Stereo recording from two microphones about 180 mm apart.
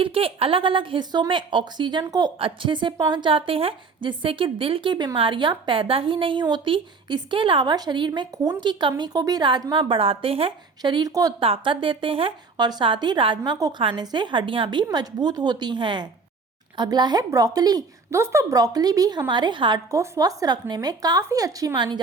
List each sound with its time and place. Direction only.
0.0 s a woman's voice: 30° right (ahead or behind)